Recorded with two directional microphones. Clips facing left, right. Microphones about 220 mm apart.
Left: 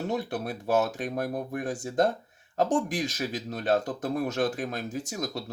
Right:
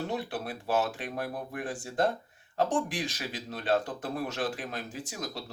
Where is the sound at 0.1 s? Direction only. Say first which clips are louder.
Left 4 dB; 45° left (ahead or behind).